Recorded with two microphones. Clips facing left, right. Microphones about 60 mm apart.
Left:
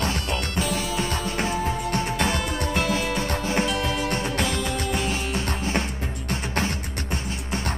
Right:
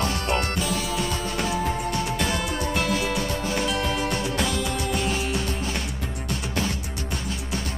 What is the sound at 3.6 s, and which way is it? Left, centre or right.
Music, centre.